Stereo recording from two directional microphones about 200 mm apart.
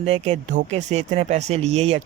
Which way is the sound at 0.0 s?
30° right (ahead or behind).